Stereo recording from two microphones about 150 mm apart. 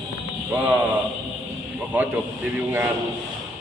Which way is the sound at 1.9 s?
10° right (ahead or behind).